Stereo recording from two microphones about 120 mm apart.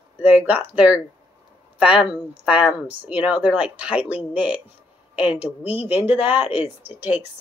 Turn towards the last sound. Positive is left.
turn(degrees=-15)  # may be behind; listen again after turning